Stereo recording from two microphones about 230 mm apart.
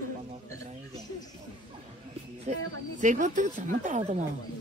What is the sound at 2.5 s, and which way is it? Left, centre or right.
Speech, right.